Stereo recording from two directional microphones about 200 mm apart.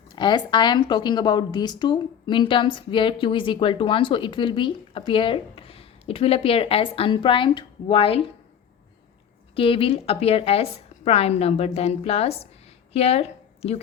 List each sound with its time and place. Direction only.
0.2 s a woman's voice: 20° left (ahead or behind)
9.6 s a woman's voice: 25° left (ahead or behind)